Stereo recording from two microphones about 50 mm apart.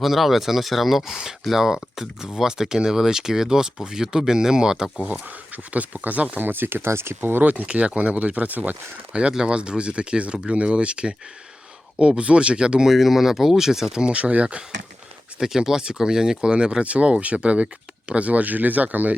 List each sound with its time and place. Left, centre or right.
0.0 s speech: centre
5.7 s speech: right
7.2 s speech: right
7.5 s speech: right
9.3 s speech: centre
12.9 s speech: centre
14.0 s speech: right
15.4 s speech: centre; by 19.1 s right